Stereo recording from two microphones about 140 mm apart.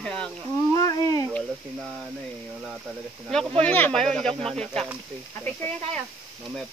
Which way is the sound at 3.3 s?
5° left (ahead or behind).